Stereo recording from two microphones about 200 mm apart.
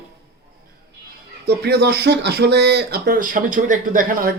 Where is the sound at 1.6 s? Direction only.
55° right (ahead or behind).